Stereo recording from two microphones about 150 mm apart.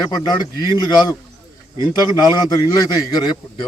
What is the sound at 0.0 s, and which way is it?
A man's voice, 25° left (ahead or behind).